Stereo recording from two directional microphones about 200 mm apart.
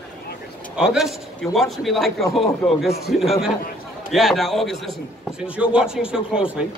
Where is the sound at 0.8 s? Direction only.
5° right (ahead or behind).